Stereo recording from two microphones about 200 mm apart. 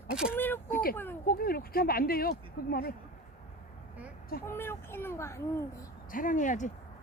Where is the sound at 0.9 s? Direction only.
10° left (ahead or behind).